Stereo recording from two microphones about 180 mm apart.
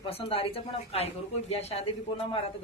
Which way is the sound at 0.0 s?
30° left (ahead or behind).